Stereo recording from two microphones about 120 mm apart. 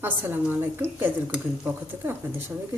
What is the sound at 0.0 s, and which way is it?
A woman's voice, 15° right (ahead or behind).